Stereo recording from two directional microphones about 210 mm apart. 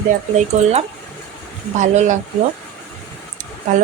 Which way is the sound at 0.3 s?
30° right (ahead or behind).